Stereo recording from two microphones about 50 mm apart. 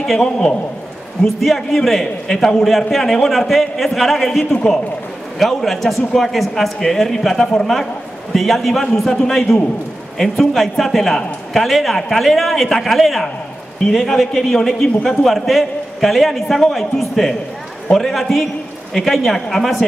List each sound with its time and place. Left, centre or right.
0.2 s a man's voice: centre
1.2 s a man's voice: centre